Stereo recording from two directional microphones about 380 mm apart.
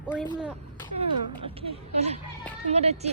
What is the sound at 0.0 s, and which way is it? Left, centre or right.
Speech, centre.